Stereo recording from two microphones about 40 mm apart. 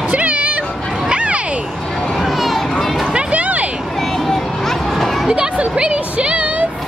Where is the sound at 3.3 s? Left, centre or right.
Right.